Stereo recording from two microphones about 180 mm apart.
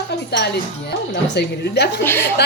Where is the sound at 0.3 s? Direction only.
65° left (ahead or behind).